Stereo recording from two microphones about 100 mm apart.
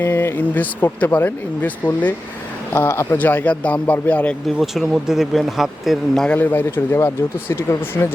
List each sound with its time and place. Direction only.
0.0 s speech: 20° left (ahead or behind)
2.7 s speech: 25° left (ahead or behind)
4.5 s speech: centre (ahead or behind)
6.2 s speech: 20° left (ahead or behind)